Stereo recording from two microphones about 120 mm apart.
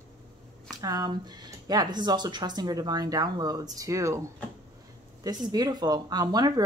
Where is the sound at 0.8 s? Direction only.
30° right (ahead or behind).